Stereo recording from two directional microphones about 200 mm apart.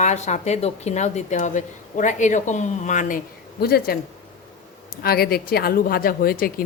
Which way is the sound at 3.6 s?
50° left (ahead or behind).